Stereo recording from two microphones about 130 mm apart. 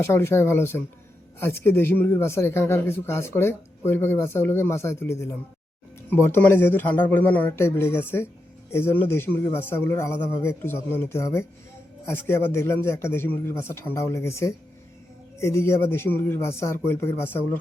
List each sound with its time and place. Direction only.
0.0 s a man's voice: 20° left (ahead or behind)